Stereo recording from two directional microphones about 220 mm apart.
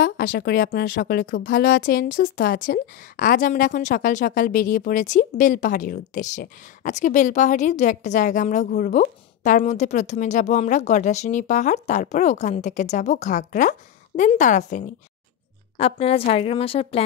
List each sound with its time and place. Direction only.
0.0 s a woman's voice: 40° left (ahead or behind); by 17.0 s 25° left (ahead or behind)